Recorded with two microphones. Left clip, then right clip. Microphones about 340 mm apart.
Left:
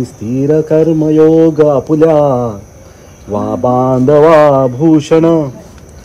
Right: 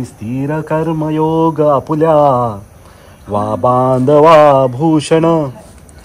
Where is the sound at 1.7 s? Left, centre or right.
Right.